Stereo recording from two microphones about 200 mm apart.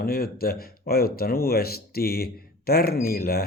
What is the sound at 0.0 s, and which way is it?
Speech, 50° left (ahead or behind).